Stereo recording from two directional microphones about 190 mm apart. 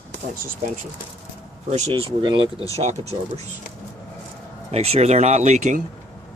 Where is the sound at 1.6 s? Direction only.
35° right (ahead or behind).